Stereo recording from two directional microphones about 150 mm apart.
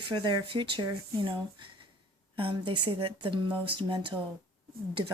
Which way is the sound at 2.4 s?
35° right (ahead or behind).